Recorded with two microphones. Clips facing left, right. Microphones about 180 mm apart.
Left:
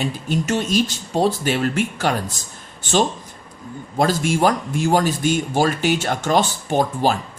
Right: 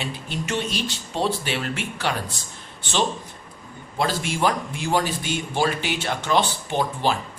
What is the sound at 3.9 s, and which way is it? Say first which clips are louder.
Speech: left 6 dB; 45° left (ahead or behind).